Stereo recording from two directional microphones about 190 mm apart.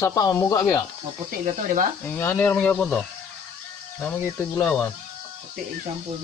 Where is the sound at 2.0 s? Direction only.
10° left (ahead or behind).